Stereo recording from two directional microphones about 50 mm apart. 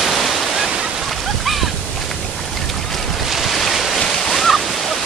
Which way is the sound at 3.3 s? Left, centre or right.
Centre.